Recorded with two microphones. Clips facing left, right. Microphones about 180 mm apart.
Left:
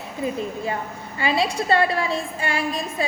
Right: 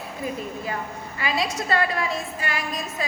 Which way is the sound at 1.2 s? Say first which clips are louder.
Left 4 dB; 30° left (ahead or behind).